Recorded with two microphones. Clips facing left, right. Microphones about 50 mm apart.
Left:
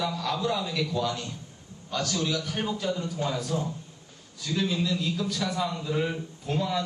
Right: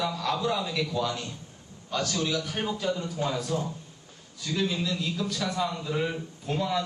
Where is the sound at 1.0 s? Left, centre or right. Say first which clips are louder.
Left 1 dB; centre.